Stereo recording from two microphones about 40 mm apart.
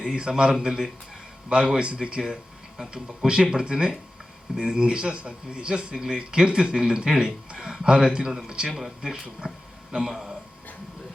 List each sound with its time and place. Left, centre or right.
0.1 s speech: right
9.5 s speech: centre